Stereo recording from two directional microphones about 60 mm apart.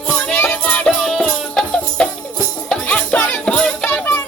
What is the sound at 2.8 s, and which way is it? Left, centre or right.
Music, left.